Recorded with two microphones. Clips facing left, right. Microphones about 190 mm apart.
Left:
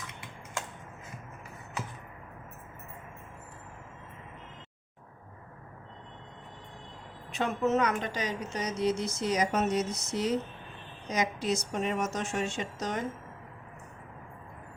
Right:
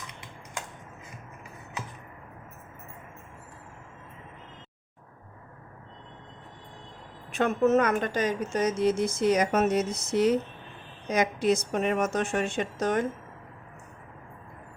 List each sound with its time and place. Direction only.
7.3 s a woman's voice: 50° right (ahead or behind)